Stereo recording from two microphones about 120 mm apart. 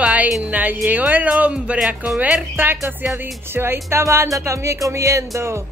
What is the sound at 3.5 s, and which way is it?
Music, 20° right (ahead or behind).